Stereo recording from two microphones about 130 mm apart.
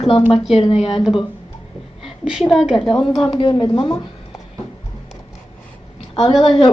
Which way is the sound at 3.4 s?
40° left (ahead or behind).